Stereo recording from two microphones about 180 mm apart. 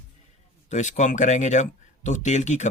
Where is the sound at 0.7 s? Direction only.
45° left (ahead or behind).